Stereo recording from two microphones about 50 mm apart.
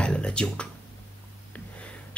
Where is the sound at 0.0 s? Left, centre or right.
Left.